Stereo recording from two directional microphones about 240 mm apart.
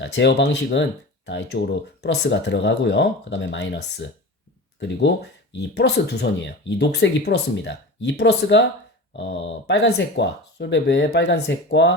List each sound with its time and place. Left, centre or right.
0.0 s speech: left